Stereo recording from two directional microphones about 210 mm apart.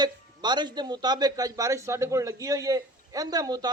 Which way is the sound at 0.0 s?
20° right (ahead or behind).